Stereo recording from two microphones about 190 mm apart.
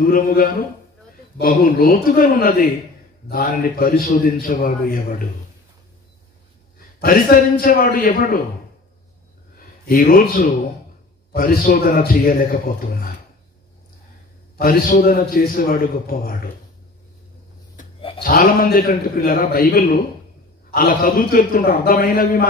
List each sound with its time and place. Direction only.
0.0 s a man's voice: 50° left (ahead or behind)
7.0 s a man's voice: 50° left (ahead or behind)
9.8 s a man's voice: 50° left (ahead or behind)
14.6 s a man's voice: 50° left (ahead or behind)
18.2 s a man's voice: 50° left (ahead or behind)